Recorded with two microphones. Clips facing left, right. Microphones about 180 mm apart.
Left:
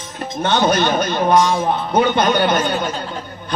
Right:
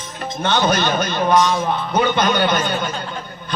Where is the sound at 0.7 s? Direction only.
40° left (ahead or behind).